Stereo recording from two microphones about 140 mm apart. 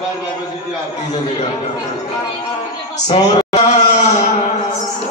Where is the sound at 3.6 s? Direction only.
55° left (ahead or behind).